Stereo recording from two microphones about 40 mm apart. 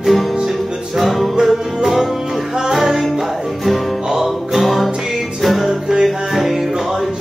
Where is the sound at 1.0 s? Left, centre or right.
Centre.